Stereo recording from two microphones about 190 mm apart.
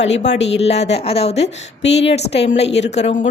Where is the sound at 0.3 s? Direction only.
70° left (ahead or behind).